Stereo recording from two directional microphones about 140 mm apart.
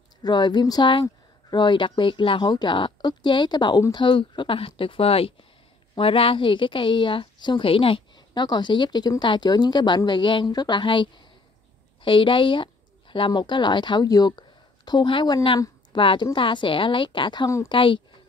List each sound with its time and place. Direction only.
0.2 s a woman's voice: 30° left (ahead or behind)